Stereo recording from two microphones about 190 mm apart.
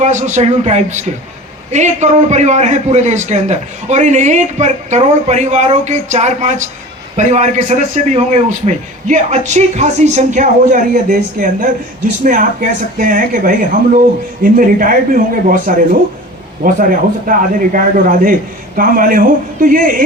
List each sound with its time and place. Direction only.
0.0 s a man's voice: 40° right (ahead or behind)